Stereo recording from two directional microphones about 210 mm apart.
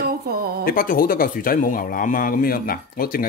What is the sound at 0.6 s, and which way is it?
A man's voice, 45° left (ahead or behind).